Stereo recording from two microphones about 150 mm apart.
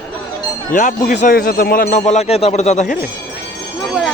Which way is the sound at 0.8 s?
55° left (ahead or behind).